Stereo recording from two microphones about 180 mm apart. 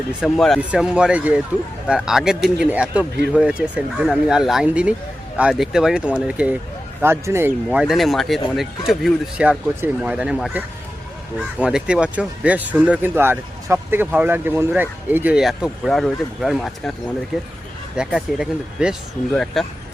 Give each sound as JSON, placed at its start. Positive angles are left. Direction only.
{"t": 0.1, "sound": "speech", "side_deg": 0}
{"t": 11.6, "sound": "speech", "side_deg": -5}